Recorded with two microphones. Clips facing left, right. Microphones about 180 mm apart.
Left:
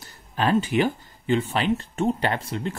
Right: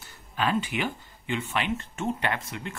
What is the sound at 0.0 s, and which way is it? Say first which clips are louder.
Speech: left 4 dB; 40° left (ahead or behind).